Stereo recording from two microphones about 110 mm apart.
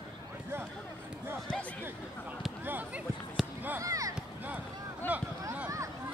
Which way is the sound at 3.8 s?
30° right (ahead or behind).